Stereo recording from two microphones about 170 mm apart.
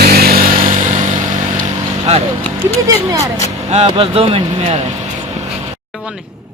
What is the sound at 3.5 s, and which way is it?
Speech, 40° right (ahead or behind).